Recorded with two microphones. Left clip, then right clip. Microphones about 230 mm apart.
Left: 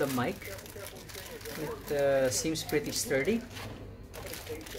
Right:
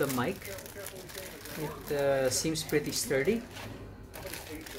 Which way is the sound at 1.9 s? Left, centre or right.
Centre.